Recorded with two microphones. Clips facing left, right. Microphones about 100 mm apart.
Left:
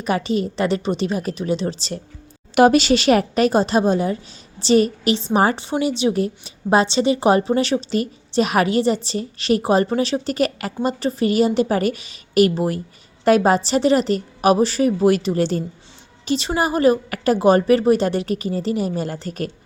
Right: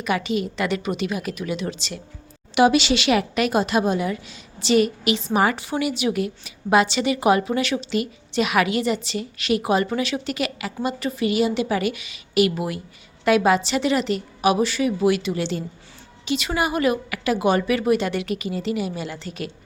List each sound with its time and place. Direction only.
0.0 s a woman's voice: 35° left (ahead or behind)